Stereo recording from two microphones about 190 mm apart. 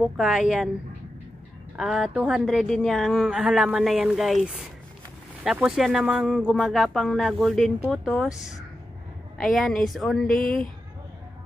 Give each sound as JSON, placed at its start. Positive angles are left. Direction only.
{"t": 0.0, "sound": "a woman's voice", "side_deg": -5}
{"t": 1.8, "sound": "a woman's voice", "side_deg": -5}
{"t": 10.4, "sound": "speech", "side_deg": 45}